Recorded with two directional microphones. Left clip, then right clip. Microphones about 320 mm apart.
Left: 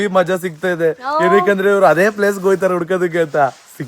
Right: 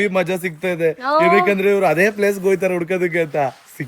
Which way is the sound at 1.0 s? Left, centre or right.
Right.